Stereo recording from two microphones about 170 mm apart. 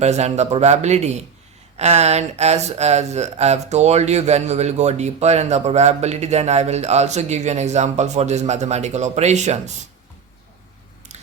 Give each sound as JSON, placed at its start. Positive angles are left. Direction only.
{"t": 0.0, "sound": "speech", "side_deg": -40}
{"t": 11.1, "sound": "biting", "side_deg": -45}